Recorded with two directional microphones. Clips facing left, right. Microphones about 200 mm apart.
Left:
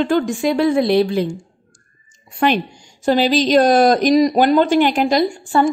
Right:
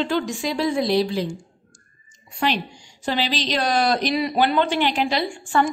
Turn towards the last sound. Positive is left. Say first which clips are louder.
# left 6 dB
turn(degrees=40)  # may be behind; listen again after turning